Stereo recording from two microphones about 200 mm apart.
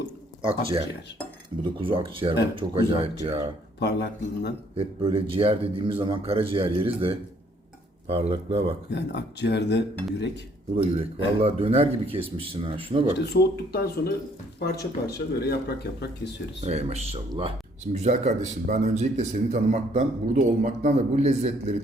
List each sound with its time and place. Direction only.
0.4 s speech: 25° right (ahead or behind)
3.8 s speech: 55° left (ahead or behind)
4.8 s speech: 25° right (ahead or behind)
8.9 s speech: 60° left (ahead or behind)
10.8 s speech: 30° right (ahead or behind)
13.1 s speech: 55° left (ahead or behind)
16.6 s a man's voice: 30° right (ahead or behind)